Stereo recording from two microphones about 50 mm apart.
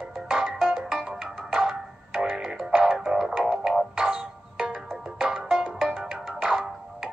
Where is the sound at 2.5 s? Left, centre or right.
Centre.